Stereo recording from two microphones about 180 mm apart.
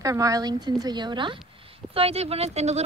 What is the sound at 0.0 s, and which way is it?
A woman's voice, 20° right (ahead or behind).